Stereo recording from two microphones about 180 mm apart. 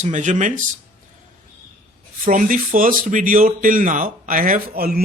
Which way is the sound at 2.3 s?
50° right (ahead or behind).